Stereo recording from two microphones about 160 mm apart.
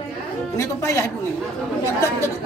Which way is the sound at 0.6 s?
15° left (ahead or behind).